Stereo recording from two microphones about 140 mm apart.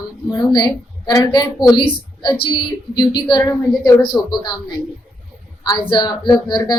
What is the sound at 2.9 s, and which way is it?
A woman's voice, 30° left (ahead or behind).